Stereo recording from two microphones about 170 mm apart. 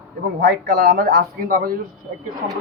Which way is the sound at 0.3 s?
80° right.